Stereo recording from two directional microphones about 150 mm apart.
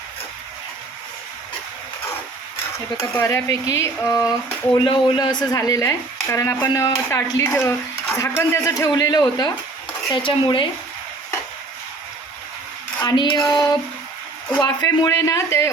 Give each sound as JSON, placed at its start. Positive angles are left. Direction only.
{"t": 3.2, "sound": "speech", "side_deg": 20}
{"t": 4.7, "sound": "speech", "side_deg": 30}
{"t": 13.0, "sound": "speech", "side_deg": 30}
{"t": 14.6, "sound": "speech", "side_deg": 25}